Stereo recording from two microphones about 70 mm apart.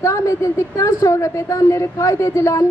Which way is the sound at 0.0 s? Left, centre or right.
Left.